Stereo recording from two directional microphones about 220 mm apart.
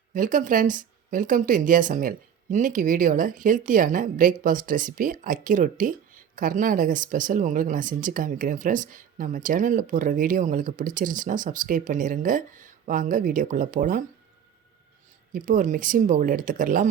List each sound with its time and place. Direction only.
0.1 s speech: 35° right (ahead or behind)
15.3 s speech: 40° right (ahead or behind)